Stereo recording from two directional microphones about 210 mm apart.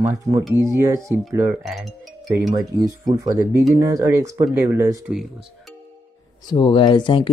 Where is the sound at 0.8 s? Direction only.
15° right (ahead or behind).